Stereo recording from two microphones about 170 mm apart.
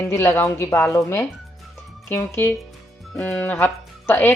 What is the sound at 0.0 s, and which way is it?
Speech, 15° left (ahead or behind).